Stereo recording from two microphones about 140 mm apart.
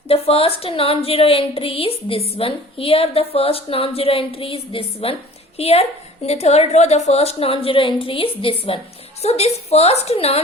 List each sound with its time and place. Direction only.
0.1 s a woman's voice: 45° left (ahead or behind)